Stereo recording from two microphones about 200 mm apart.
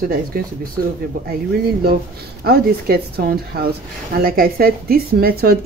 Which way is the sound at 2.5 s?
50° right (ahead or behind).